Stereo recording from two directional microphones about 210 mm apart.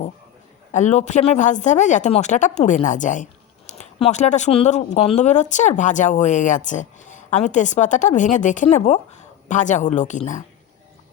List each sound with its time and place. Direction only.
0.7 s speech: 35° left (ahead or behind)